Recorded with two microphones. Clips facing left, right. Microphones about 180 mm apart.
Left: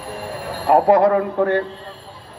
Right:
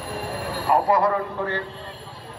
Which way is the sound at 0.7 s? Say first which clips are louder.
Left 7 dB; 55° left (ahead or behind).